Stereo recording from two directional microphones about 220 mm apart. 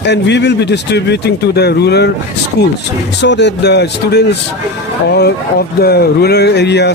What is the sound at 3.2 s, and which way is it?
A man's voice, 50° left (ahead or behind).